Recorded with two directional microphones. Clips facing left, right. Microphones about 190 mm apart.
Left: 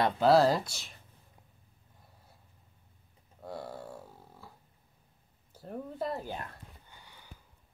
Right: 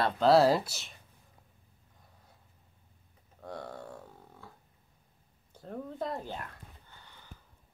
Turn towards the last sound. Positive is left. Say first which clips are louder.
# even
turn(degrees=10)  # may be behind; listen again after turning